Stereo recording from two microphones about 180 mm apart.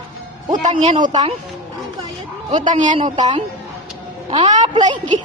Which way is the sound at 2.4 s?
40° right (ahead or behind).